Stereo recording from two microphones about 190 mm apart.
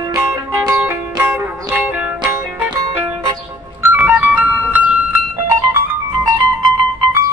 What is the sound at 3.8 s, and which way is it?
Music, 5° right (ahead or behind).